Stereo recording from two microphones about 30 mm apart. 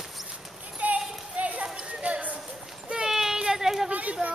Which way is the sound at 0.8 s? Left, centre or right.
Right.